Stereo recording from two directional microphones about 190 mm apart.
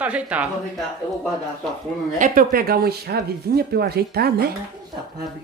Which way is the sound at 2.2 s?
45° right (ahead or behind).